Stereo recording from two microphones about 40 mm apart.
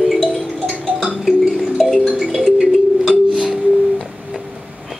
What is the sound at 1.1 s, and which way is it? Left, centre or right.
Tick-tock, centre.